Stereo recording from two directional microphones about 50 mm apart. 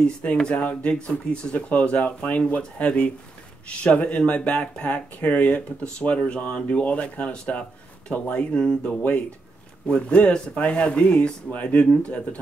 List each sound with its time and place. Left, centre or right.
0.0 s speech: left
6.1 s speech: centre
8.9 s speech: left